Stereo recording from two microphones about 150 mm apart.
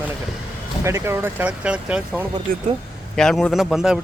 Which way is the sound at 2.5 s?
70° right (ahead or behind).